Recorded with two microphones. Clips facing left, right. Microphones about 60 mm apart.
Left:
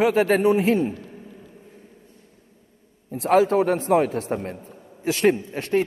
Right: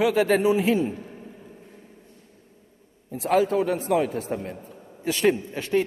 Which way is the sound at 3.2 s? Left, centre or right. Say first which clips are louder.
Left 3 dB; left.